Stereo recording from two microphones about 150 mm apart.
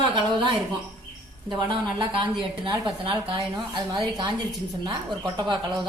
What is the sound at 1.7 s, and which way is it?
Speech, 30° right (ahead or behind).